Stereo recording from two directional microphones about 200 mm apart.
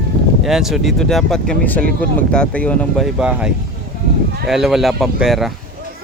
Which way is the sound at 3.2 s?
5° right (ahead or behind).